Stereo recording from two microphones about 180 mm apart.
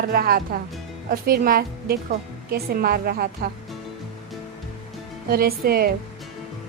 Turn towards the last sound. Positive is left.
turn(degrees=-60)  # may be behind; listen again after turning